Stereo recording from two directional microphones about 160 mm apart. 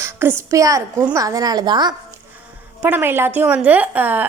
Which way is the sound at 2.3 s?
10° right (ahead or behind).